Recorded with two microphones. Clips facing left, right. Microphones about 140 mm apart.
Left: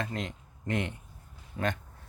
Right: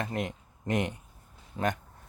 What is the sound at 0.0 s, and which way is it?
Speech, 20° right (ahead or behind).